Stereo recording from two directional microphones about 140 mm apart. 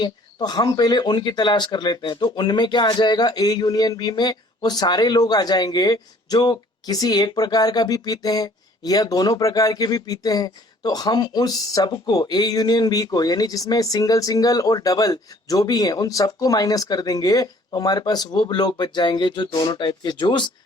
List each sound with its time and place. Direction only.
0.0 s speech: 30° left (ahead or behind)